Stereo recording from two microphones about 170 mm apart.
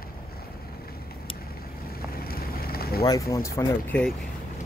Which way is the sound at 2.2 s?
65° left (ahead or behind).